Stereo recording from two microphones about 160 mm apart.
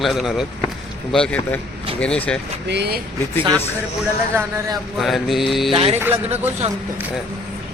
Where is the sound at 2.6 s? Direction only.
90° right.